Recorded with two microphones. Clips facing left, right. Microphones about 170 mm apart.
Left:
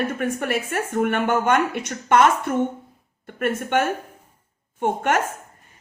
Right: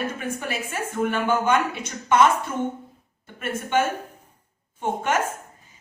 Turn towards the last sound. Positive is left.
turn(degrees=60)  # may be behind; listen again after turning